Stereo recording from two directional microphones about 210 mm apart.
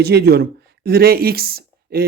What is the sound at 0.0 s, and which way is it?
Speech, 50° right (ahead or behind).